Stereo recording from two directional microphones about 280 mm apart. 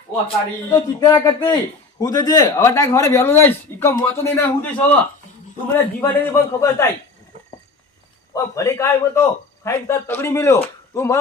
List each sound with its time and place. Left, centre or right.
0.7 s speech: centre
8.3 s speech: centre